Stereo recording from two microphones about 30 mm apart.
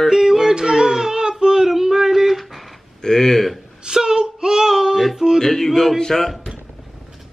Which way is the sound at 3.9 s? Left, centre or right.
Centre.